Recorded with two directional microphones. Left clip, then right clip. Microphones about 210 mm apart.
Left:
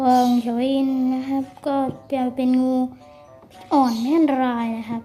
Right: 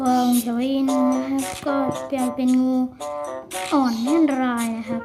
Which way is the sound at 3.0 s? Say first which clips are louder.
Right 16 dB; 45° right (ahead or behind).